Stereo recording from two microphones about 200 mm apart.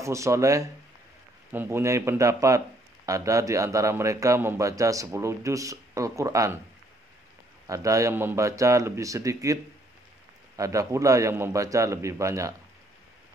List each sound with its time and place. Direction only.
0.0 s a man's voice: 15° right (ahead or behind)
7.6 s a man's voice: 15° right (ahead or behind)